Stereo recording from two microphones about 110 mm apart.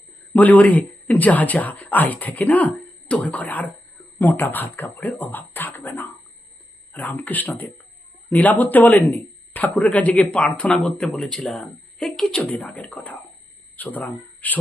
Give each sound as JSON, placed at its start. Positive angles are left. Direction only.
{"t": 0.3, "sound": "speech", "side_deg": 15}